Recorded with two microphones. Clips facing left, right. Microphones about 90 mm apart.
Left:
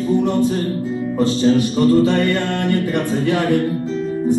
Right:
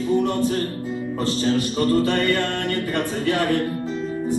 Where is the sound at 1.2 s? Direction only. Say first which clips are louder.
Left 7 dB; 20° left (ahead or behind).